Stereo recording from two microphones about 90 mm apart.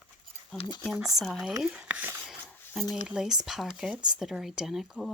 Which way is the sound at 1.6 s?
15° right (ahead or behind).